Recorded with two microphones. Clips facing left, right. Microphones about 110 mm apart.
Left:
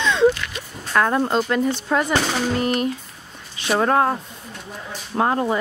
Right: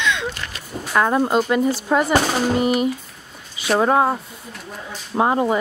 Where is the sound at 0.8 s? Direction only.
5° right (ahead or behind).